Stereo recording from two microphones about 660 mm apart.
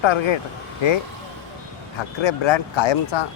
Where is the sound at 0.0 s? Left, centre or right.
Left.